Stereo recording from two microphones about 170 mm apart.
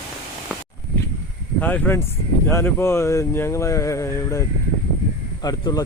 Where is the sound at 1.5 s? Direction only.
10° left (ahead or behind).